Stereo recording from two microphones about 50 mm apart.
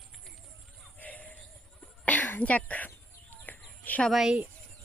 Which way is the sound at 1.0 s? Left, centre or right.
Left.